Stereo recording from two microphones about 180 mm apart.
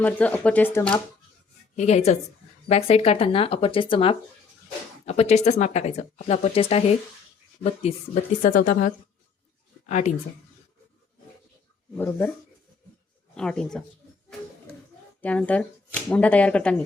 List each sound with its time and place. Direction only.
0.0 s speech: 10° left (ahead or behind)
1.7 s a woman's voice: 40° left (ahead or behind)
11.9 s speech: 10° left (ahead or behind)
13.3 s speech: 5° left (ahead or behind)
15.2 s speech: 10° left (ahead or behind)